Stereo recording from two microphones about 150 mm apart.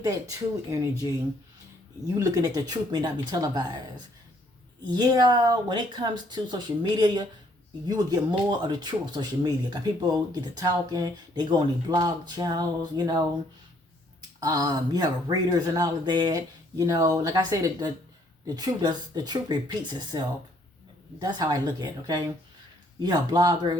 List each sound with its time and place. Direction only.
0.0 s speech: 20° right (ahead or behind)
2.0 s speech: 25° right (ahead or behind)
4.8 s speech: 30° right (ahead or behind)
14.4 s speech: 25° right (ahead or behind)